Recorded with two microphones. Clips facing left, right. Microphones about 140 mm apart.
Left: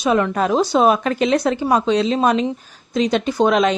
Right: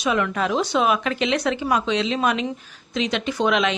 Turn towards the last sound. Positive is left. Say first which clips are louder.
# left 5 dB
turn(degrees=40)  # may be behind; listen again after turning